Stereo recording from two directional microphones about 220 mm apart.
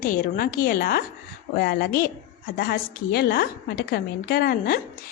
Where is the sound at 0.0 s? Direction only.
40° left (ahead or behind).